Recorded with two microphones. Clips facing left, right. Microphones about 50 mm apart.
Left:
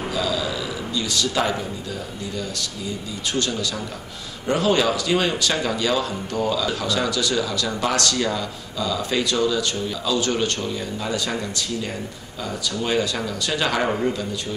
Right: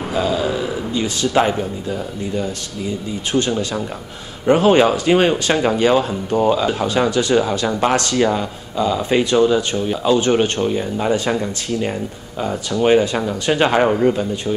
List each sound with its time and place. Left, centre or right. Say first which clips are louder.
0.1 s speech: right 7 dB; right
13.8 s speech: right 7 dB; centre